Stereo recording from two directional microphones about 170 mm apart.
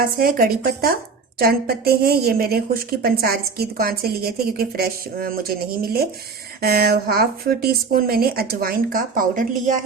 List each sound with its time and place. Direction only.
0.2 s a woman's voice: 60° right (ahead or behind)